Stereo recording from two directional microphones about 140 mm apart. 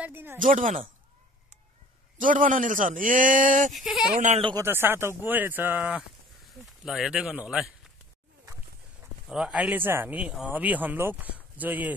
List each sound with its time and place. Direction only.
0.0 s speech: 15° right (ahead or behind)
0.4 s speech: 70° right (ahead or behind)
2.1 s speech: 70° right (ahead or behind)
3.7 s speech: centre (ahead or behind)
4.1 s speech: 60° right (ahead or behind)
4.6 s speech: 15° right (ahead or behind)
9.3 s speech: 5° right (ahead or behind)